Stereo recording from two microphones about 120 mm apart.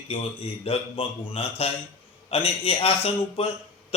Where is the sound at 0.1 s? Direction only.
55° left (ahead or behind).